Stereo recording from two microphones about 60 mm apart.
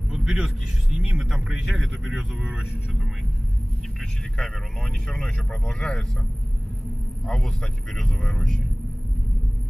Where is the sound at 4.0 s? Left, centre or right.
Centre.